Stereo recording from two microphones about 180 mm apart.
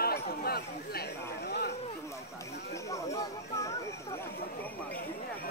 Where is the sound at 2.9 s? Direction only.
15° left (ahead or behind).